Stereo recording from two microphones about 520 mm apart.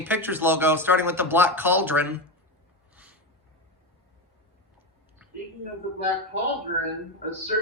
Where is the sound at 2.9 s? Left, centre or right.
Centre.